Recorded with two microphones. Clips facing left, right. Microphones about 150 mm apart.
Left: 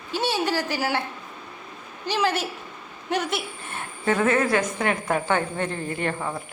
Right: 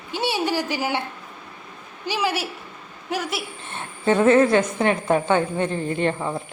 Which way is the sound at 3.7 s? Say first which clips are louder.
Right 4 dB; 25° right (ahead or behind).